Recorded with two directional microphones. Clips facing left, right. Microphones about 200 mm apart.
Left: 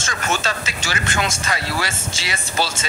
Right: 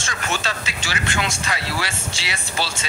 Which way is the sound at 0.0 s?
45° left (ahead or behind).